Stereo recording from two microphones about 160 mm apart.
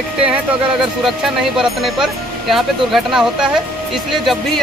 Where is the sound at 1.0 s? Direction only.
Centre (ahead or behind).